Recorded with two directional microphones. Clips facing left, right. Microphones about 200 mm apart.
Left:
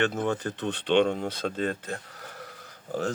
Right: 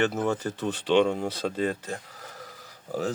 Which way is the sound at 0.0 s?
5° right (ahead or behind).